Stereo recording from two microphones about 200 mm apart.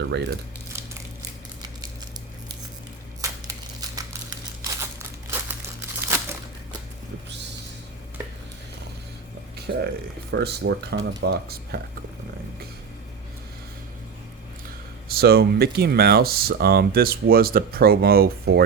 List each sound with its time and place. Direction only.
4.8 s crumpling: 10° right (ahead or behind)
9.7 s speech: 50° right (ahead or behind)
15.1 s speech: 50° right (ahead or behind)